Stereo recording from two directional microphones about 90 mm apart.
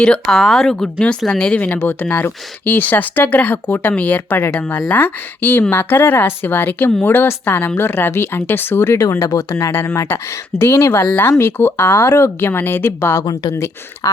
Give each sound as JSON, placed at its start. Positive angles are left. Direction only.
{"t": 0.0, "sound": "speech", "side_deg": 10}
{"t": 9.0, "sound": "speech", "side_deg": 40}
{"t": 11.0, "sound": "speech", "side_deg": 15}
{"t": 11.3, "sound": "speech", "side_deg": 30}
{"t": 13.2, "sound": "speech", "side_deg": 40}